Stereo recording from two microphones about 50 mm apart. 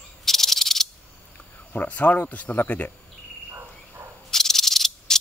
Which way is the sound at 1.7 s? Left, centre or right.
Left.